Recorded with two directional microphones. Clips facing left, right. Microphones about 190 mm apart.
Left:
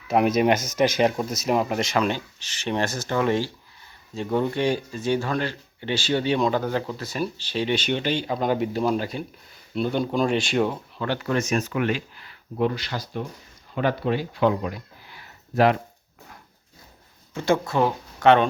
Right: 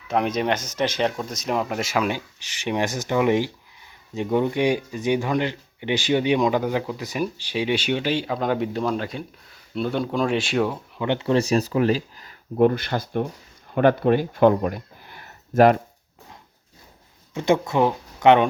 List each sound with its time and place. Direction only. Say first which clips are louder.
0.1 s speech: left 3 dB; 5° left (ahead or behind)
10.9 s speech: right 8 dB; 20° right (ahead or behind); by 15.8 s 45° right (ahead or behind)
17.3 s speech: right 2 dB; 20° right (ahead or behind)